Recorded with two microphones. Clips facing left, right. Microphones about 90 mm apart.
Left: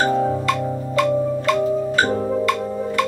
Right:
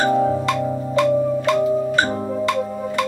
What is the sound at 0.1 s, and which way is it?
Music, 5° right (ahead or behind).